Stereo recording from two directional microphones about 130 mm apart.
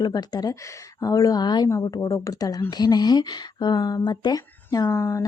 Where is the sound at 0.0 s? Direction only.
30° left (ahead or behind).